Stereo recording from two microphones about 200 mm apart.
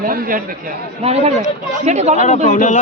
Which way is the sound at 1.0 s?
30° right (ahead or behind).